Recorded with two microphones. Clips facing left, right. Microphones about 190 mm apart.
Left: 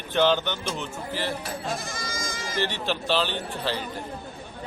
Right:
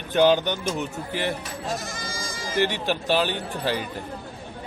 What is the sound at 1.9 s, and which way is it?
Goat, 30° right (ahead or behind).